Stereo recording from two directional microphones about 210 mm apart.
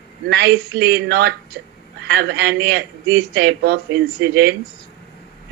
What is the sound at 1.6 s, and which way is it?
Speech, 50° right (ahead or behind).